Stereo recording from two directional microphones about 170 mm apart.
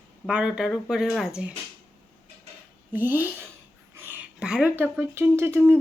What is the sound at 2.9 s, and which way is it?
A woman's voice, 10° right (ahead or behind).